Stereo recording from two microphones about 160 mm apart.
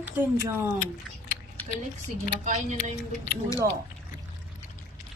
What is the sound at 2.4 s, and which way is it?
Speech, 50° right (ahead or behind).